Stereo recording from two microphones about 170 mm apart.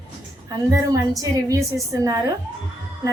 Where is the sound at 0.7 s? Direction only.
20° right (ahead or behind).